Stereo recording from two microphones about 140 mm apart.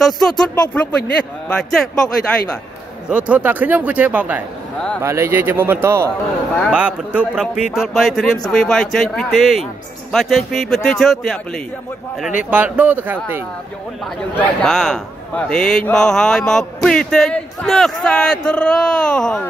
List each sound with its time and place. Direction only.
0.0 s a man's voice: 5° left (ahead or behind)
3.1 s speech: 10° right (ahead or behind)
6.7 s a man's voice: 5° right (ahead or behind)
12.4 s speech: 10° right (ahead or behind)
14.6 s a man's voice: 5° left (ahead or behind)